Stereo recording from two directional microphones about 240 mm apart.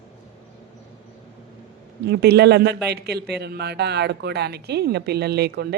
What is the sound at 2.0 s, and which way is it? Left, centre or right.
Speech, right.